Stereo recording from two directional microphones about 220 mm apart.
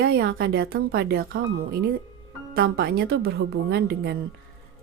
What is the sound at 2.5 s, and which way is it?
A woman's voice, 45° right (ahead or behind).